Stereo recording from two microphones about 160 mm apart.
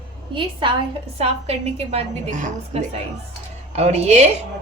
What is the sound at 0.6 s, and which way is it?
A woman's voice, 30° right (ahead or behind).